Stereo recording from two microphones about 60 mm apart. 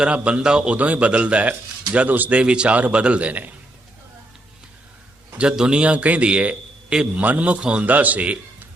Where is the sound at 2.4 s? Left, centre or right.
Centre.